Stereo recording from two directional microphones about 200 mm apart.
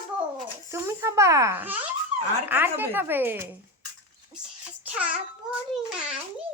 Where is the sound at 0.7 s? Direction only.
15° right (ahead or behind).